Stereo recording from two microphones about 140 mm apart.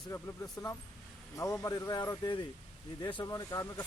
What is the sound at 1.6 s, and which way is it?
Speech, 20° left (ahead or behind).